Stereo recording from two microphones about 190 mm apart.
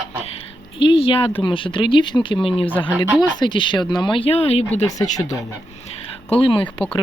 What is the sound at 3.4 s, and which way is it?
Speech, 25° left (ahead or behind).